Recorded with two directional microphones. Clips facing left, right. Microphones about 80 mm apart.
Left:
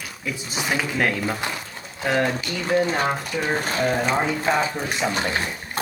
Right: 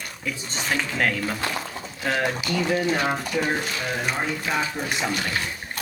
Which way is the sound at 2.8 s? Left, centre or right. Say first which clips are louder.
Left 1 dB; left.